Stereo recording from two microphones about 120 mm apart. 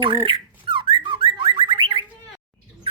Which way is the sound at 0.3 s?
45° right (ahead or behind).